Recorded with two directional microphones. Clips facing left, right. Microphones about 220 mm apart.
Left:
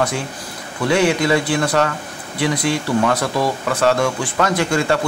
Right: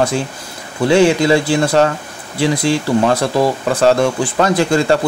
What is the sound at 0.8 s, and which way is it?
Speech, 30° right (ahead or behind).